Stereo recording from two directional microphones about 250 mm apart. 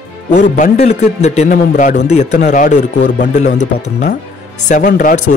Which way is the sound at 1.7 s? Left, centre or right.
Left.